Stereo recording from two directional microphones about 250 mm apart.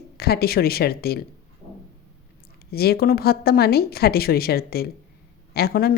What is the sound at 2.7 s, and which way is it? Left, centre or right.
A woman's voice, left.